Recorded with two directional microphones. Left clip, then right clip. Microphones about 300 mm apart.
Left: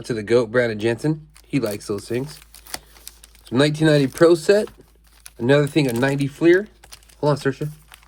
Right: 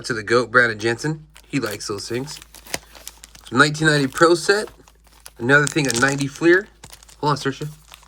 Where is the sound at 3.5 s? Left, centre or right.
Centre.